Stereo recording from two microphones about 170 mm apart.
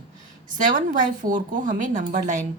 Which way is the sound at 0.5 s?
50° right (ahead or behind).